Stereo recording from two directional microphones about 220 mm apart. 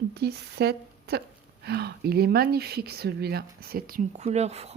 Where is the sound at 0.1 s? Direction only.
50° right (ahead or behind).